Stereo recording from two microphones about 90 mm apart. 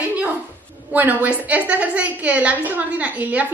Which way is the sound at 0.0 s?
15° right (ahead or behind).